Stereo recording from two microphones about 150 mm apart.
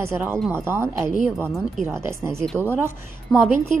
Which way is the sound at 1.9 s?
15° right (ahead or behind).